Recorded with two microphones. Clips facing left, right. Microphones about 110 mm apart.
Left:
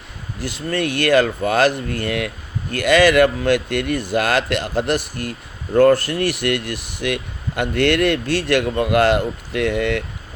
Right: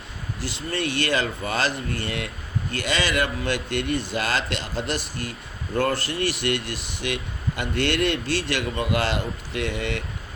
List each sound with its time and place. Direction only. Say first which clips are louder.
0.3 s a man's voice: left 6 dB; 55° left (ahead or behind)